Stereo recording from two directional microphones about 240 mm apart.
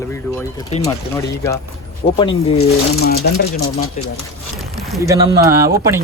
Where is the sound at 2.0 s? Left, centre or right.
Left.